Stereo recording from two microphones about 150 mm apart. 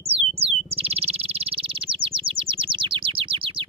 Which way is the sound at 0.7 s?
40° right (ahead or behind).